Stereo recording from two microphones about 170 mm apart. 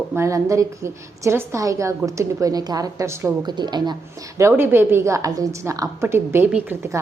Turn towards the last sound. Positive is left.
turn(degrees=-15)  # may be behind; listen again after turning